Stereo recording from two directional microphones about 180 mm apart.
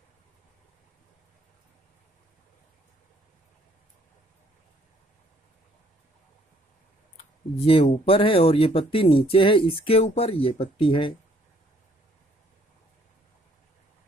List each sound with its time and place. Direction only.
7.6 s speech: 30° left (ahead or behind)